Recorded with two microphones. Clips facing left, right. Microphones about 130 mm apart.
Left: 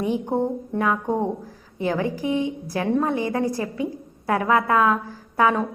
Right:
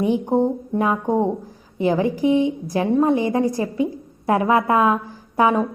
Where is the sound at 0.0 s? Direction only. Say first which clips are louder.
Right 4 dB; 20° right (ahead or behind).